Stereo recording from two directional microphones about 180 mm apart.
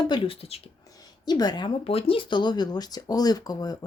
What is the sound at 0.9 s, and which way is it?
Speech, 20° left (ahead or behind).